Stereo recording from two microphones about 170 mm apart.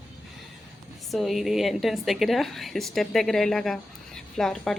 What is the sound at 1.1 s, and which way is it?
A woman's voice, centre (ahead or behind).